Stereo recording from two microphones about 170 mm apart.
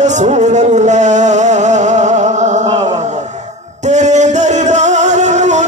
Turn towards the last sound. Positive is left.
turn(degrees=-45)  # may be behind; listen again after turning